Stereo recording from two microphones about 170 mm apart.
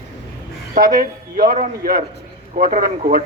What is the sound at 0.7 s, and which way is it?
A man's voice, 55° right (ahead or behind).